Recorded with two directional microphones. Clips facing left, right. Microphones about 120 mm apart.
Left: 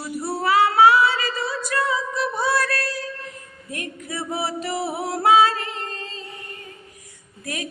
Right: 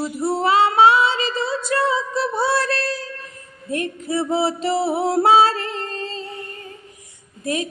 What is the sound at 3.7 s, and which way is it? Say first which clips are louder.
Music: right 9 dB; 30° right (ahead or behind).